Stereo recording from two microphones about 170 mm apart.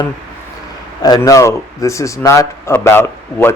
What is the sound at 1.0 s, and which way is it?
Speech, 20° left (ahead or behind).